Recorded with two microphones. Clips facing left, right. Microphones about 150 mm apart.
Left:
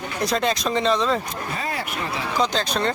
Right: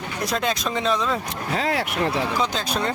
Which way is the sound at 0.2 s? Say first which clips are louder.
Left 2 dB; centre (ahead or behind).